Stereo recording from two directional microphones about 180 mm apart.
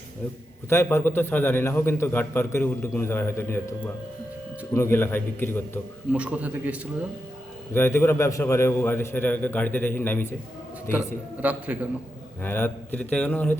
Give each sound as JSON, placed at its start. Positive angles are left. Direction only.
{"t": 0.7, "sound": "a man's voice", "side_deg": 15}
{"t": 6.1, "sound": "a man's voice", "side_deg": -5}
{"t": 7.7, "sound": "a man's voice", "side_deg": 15}
{"t": 11.4, "sound": "a man's voice", "side_deg": -10}
{"t": 12.4, "sound": "a man's voice", "side_deg": 10}